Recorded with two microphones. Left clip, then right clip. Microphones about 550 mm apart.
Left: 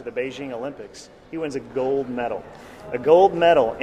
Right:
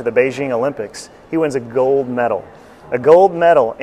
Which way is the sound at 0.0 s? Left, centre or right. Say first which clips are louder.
Right 13 dB; right.